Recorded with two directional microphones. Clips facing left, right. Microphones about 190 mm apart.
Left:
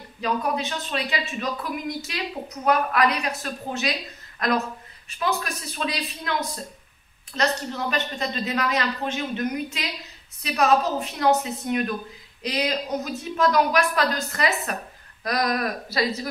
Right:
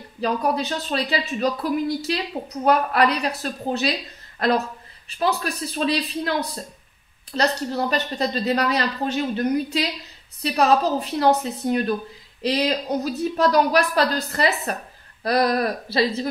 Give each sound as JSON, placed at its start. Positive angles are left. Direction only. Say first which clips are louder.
{"t": 0.2, "sound": "speech", "louder": "right 3 dB", "side_deg": -35}
{"t": 7.3, "sound": "speech", "louder": "right 3 dB", "side_deg": -35}